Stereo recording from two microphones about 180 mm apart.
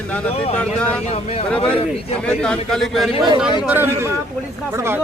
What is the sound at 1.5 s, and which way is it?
Speech, 5° left (ahead or behind).